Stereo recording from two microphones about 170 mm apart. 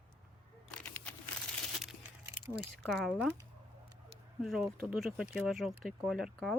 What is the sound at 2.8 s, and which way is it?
Speech, centre (ahead or behind).